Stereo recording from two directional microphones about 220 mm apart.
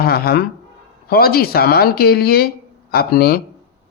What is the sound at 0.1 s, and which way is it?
Speech, 45° left (ahead or behind).